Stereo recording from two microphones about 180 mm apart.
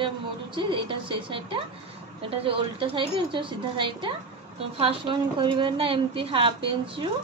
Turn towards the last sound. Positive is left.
turn(degrees=-30)  # may be behind; listen again after turning